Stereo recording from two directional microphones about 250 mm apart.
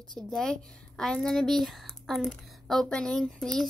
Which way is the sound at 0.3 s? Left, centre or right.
Centre.